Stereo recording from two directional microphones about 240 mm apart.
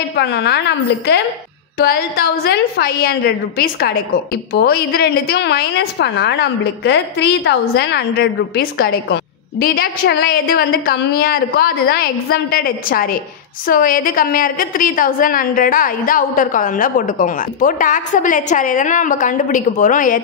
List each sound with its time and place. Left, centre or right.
0.1 s a woman's voice: left